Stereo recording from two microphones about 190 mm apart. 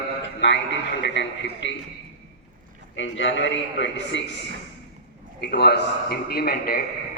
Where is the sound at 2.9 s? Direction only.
80° left.